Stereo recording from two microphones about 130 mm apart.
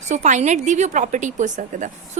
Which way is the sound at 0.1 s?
70° right (ahead or behind).